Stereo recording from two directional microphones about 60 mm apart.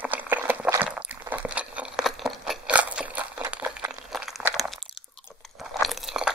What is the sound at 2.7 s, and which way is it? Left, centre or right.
Crunch, right.